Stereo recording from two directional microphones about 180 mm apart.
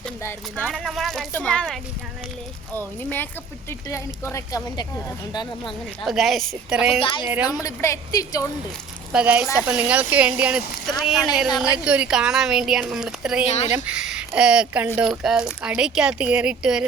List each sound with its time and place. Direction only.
0.2 s speech: 10° left (ahead or behind)
5.6 s speech: centre (ahead or behind)
7.0 s a woman's voice: 25° left (ahead or behind)
7.3 s speech: 10° right (ahead or behind)
7.5 s a woman's voice: 15° left (ahead or behind)
9.1 s speech: 5° right (ahead or behind)
11.5 s a woman's voice: 20° left (ahead or behind)
11.9 s speech: 5° right (ahead or behind)
13.4 s speech: 35° left (ahead or behind)
13.7 s speech: 5° right (ahead or behind)